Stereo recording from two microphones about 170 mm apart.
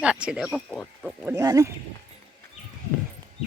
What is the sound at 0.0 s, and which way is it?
Speech, 5° right (ahead or behind).